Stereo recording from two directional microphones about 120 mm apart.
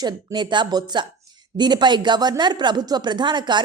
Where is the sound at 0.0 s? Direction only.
35° right (ahead or behind).